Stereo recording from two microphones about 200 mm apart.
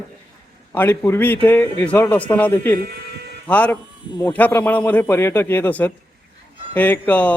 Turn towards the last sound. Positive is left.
turn(degrees=5)  # may be behind; listen again after turning